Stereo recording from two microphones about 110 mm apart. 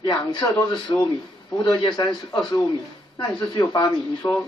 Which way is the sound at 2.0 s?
35° left (ahead or behind).